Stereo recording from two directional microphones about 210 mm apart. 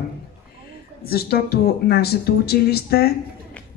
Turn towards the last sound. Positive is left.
turn(degrees=50)  # may be behind; listen again after turning